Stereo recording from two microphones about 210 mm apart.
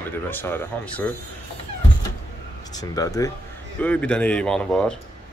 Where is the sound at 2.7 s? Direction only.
15° left (ahead or behind).